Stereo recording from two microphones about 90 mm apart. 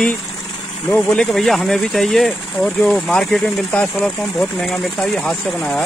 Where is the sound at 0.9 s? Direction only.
10° left (ahead or behind).